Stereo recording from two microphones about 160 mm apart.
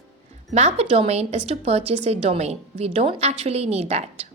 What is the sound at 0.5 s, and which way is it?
A woman's voice, 45° right (ahead or behind).